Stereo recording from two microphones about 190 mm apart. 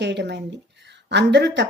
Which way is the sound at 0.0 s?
65° right (ahead or behind).